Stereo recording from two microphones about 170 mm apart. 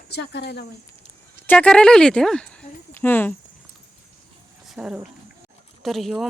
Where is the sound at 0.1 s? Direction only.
80° left.